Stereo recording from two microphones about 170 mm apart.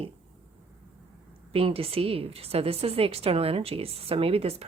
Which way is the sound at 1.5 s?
35° right (ahead or behind).